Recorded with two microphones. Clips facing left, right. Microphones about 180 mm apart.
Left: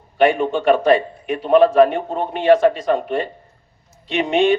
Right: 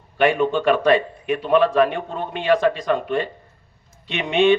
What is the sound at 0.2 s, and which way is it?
Speech, 35° left (ahead or behind).